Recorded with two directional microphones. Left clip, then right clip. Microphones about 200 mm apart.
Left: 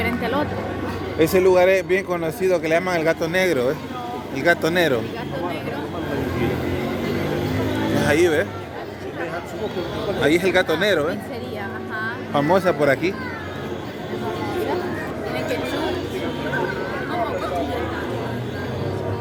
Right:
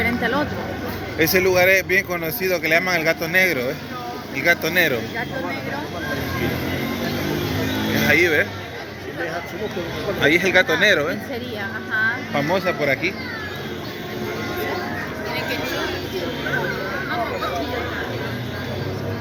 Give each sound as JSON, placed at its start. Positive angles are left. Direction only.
{"t": 0.0, "sound": "a sound", "side_deg": -20}
{"t": 1.2, "sound": "speech", "side_deg": 15}
{"t": 8.0, "sound": "speech", "side_deg": 15}
{"t": 10.2, "sound": "speech", "side_deg": 5}
{"t": 12.3, "sound": "speech", "side_deg": 20}
{"t": 12.5, "sound": "speech", "side_deg": 35}